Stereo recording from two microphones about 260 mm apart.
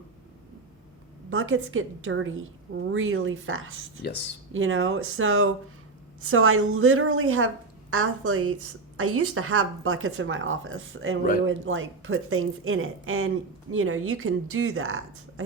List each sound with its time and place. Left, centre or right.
1.3 s a woman's voice: right